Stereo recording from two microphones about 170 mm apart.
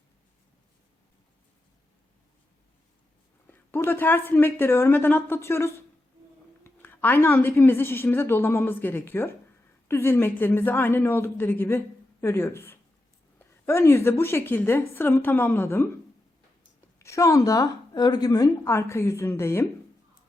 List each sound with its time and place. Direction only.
3.5 s a woman's voice: 10° left (ahead or behind)
17.0 s a woman's voice: 15° left (ahead or behind)